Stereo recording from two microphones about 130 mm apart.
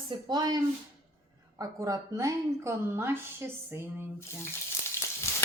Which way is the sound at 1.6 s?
25° right (ahead or behind).